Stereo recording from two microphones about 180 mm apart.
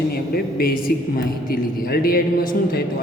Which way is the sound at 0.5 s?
55° left (ahead or behind).